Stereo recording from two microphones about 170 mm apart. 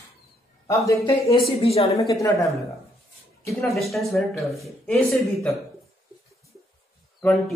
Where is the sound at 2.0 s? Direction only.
20° left (ahead or behind).